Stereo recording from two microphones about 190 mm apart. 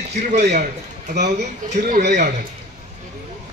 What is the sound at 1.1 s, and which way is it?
Speech, 40° right (ahead or behind).